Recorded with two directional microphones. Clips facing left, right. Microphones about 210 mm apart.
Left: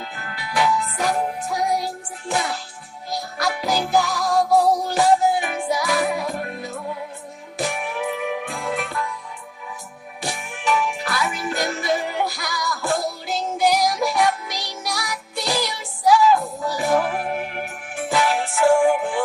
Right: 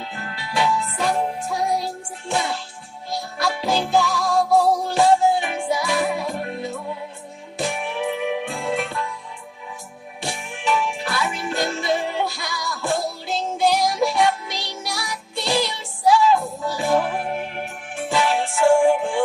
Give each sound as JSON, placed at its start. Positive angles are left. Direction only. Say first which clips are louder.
{"t": 0.0, "sound": "music", "louder": "right 1 dB", "side_deg": -25}
{"t": 10.2, "sound": "music", "louder": "even", "side_deg": -30}